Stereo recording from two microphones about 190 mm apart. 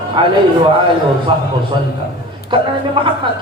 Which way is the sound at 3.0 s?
25° right (ahead or behind).